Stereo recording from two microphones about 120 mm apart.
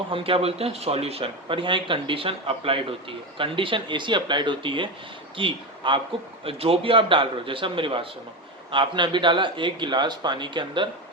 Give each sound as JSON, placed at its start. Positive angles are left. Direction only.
{"t": 0.1, "sound": "a man's voice", "side_deg": -50}